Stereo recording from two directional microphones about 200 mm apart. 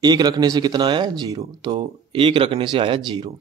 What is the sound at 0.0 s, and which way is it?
Speech, 20° right (ahead or behind).